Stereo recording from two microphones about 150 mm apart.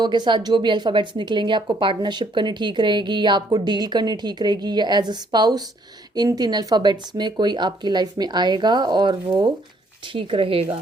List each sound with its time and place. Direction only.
0.0 s a woman's voice: 30° right (ahead or behind)